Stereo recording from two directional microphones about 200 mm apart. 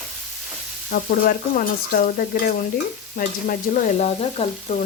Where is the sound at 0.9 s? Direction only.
45° left (ahead or behind).